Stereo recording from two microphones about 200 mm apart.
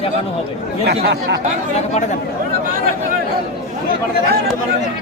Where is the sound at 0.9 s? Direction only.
55° right (ahead or behind).